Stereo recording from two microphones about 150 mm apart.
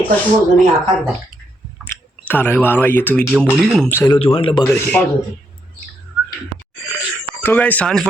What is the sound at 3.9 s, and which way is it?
Speech, 15° left (ahead or behind).